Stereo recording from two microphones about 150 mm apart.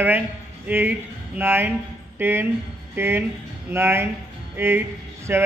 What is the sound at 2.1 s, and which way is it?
Speech, 15° right (ahead or behind).